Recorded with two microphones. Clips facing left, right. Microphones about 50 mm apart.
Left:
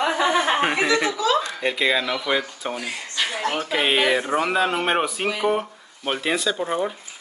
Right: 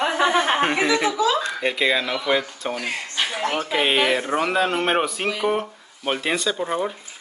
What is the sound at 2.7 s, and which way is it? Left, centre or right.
Speech, right.